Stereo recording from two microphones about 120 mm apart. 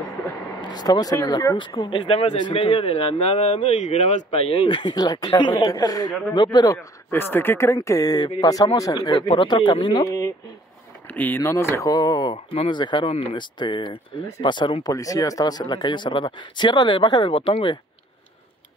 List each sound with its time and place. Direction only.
0.6 s speech: 35° left (ahead or behind)
1.8 s speech: 50° left (ahead or behind)
7.1 s speech: 20° left (ahead or behind)
9.1 s speech: 45° left (ahead or behind)
10.0 s speech: 30° left (ahead or behind)
11.1 s speech: 15° left (ahead or behind); by 17.7 s 45° left (ahead or behind)